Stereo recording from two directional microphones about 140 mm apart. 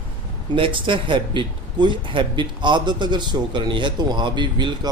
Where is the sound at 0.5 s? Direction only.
35° right (ahead or behind).